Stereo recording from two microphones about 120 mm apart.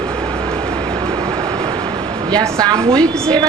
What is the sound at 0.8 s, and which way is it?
Air conditioning, 40° right (ahead or behind).